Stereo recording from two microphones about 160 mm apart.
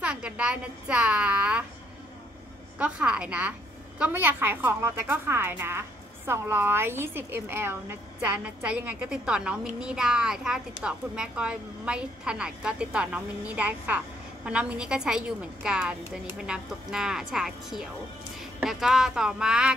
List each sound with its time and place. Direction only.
0.0 s a woman's voice: 5° right (ahead or behind)
2.8 s a woman's voice: 5° right (ahead or behind)